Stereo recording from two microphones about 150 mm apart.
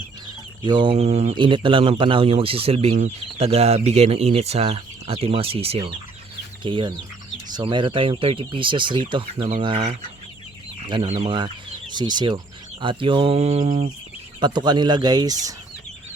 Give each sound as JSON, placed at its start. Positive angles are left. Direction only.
{"t": 0.6, "sound": "speech", "side_deg": -30}
{"t": 1.4, "sound": "speech", "side_deg": -30}
{"t": 11.1, "sound": "speech", "side_deg": -45}
{"t": 11.3, "sound": "speech", "side_deg": -30}
{"t": 14.4, "sound": "speech", "side_deg": -30}